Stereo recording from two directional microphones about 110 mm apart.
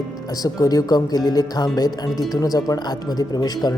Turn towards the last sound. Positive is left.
turn(degrees=35)  # may be behind; listen again after turning